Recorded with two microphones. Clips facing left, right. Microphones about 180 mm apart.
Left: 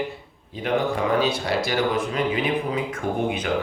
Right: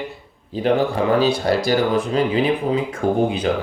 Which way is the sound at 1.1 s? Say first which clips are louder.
Right 5 dB; 40° right (ahead or behind).